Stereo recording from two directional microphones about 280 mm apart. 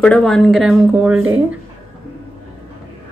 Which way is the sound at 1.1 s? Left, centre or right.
Right.